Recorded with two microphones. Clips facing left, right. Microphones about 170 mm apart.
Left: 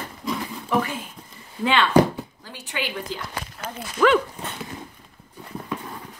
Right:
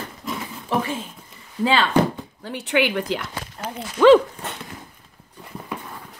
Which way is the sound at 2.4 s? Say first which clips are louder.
Right 11 dB; 65° right (ahead or behind).